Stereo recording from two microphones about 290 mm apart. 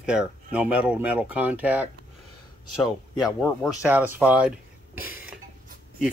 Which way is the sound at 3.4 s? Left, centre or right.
Centre.